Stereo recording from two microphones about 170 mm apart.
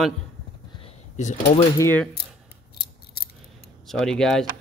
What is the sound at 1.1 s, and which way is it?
Speech, 40° left (ahead or behind).